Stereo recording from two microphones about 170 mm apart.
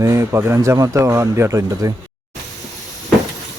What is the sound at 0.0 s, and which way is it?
Speech, 15° right (ahead or behind).